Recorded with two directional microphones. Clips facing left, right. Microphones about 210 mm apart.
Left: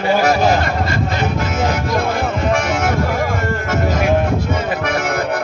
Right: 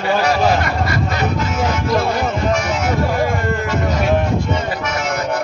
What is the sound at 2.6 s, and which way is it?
Speech, 55° left (ahead or behind).